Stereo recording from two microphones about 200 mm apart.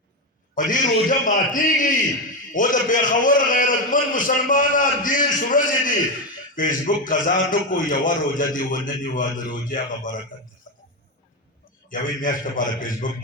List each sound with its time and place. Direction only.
0.5 s a man's voice: 40° left (ahead or behind)
11.9 s a man's voice: 40° left (ahead or behind)